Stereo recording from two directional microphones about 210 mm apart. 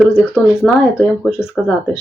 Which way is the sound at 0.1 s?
5° left (ahead or behind).